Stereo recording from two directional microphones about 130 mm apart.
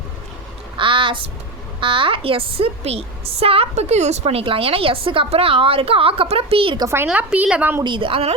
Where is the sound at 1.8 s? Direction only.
40° right (ahead or behind).